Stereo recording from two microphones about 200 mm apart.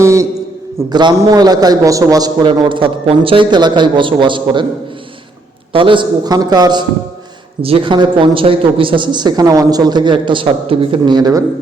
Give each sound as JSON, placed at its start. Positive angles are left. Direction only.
{"t": 0.0, "sound": "a man's voice", "side_deg": -15}
{"t": 5.7, "sound": "a man's voice", "side_deg": -25}